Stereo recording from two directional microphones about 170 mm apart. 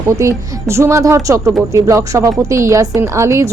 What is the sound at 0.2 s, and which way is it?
A woman's voice, 15° right (ahead or behind).